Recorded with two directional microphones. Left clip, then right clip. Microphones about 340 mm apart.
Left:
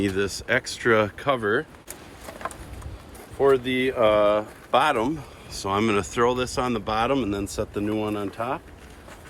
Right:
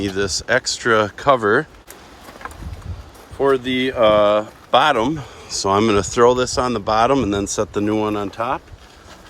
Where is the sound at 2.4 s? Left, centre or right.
Centre.